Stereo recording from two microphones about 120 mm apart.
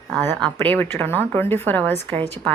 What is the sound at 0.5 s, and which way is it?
A woman's voice, 15° left (ahead or behind).